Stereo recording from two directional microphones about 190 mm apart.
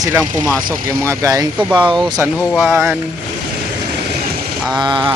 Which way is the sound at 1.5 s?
5° right (ahead or behind).